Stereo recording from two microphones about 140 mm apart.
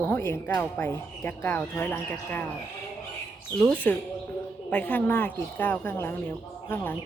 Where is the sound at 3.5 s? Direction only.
10° left (ahead or behind).